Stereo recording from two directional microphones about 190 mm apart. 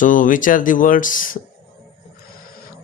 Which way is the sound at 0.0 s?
45° left (ahead or behind).